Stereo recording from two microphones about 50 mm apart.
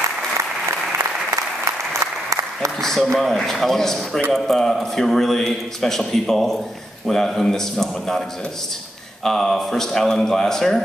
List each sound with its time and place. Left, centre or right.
0.9 s applause: right
2.8 s a man's voice: centre
9.2 s a man's voice: centre